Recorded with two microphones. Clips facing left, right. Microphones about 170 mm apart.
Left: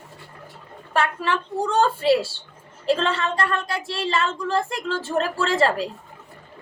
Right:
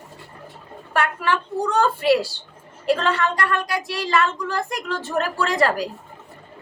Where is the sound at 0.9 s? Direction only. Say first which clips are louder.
Right 1 dB; 25° left (ahead or behind).